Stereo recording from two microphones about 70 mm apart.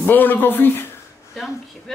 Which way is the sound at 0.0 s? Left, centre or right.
Left.